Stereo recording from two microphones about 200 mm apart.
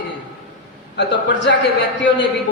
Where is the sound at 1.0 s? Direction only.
60° left (ahead or behind).